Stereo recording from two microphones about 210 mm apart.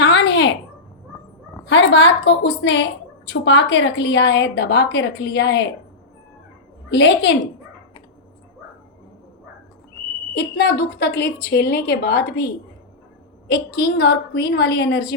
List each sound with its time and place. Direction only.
0.0 s a sound: 55° left (ahead or behind)
1.7 s a woman's voice: 60° left (ahead or behind)
6.9 s a woman's voice: 55° left (ahead or behind)
10.3 s a woman's voice: 50° left (ahead or behind)
13.5 s a woman's voice: 50° left (ahead or behind)